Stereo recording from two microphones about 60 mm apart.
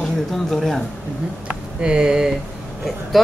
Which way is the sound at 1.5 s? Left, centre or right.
Centre.